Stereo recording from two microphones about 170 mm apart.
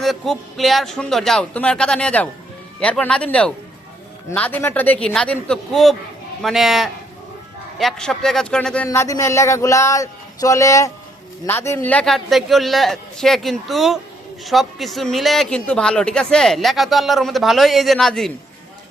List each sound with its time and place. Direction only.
0.0 s speech: centre (ahead or behind)
8.9 s speech: 15° left (ahead or behind)